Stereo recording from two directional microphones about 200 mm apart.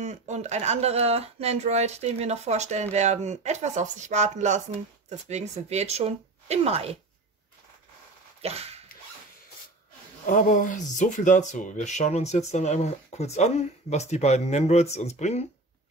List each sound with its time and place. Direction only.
0.0 s speech: 35° right (ahead or behind)
8.4 s dog: 30° right (ahead or behind)
10.2 s speech: 40° left (ahead or behind)